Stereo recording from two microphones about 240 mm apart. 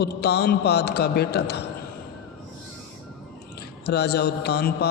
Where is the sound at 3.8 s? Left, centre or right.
Left.